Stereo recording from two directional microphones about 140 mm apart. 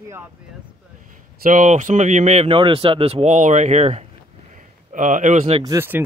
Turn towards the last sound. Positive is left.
turn(degrees=-20)  # may be behind; listen again after turning